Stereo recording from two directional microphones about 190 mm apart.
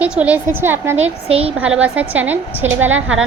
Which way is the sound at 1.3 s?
5° right (ahead or behind).